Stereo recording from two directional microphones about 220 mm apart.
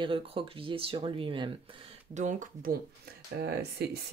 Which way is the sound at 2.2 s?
35° right (ahead or behind).